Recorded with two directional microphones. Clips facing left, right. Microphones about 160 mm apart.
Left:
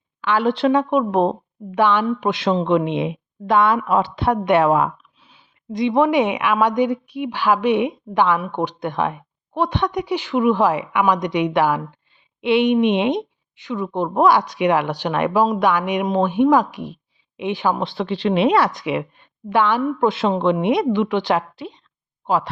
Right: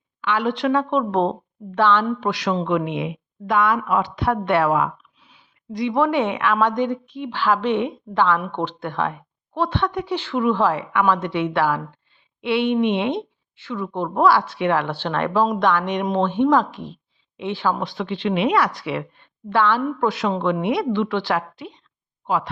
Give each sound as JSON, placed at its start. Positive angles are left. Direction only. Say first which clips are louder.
{"t": 0.2, "sound": "a woman's voice", "louder": "left 4 dB", "side_deg": 35}
{"t": 0.7, "sound": "speech", "louder": "left 3 dB", "side_deg": 15}
{"t": 2.4, "sound": "a woman's voice", "louder": "left 5 dB", "side_deg": 25}
{"t": 4.7, "sound": "a woman's voice", "louder": "left 3 dB", "side_deg": 30}
{"t": 17.9, "sound": "a woman's voice", "louder": "left 3 dB", "side_deg": 35}